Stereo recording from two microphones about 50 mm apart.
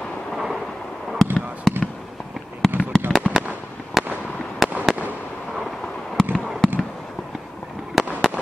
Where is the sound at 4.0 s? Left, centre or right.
Centre.